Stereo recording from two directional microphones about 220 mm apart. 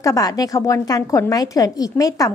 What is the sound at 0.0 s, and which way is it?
A woman's voice, 15° left (ahead or behind).